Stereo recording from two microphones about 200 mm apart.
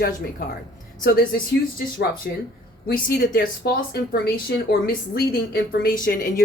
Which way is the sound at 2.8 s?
50° left (ahead or behind).